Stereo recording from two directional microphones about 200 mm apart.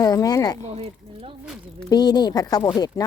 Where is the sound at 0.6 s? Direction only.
30° right (ahead or behind).